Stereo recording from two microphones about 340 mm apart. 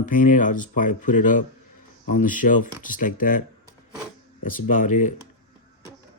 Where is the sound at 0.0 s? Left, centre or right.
Left.